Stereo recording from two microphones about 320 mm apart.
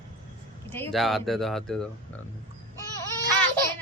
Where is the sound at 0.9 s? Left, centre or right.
Centre.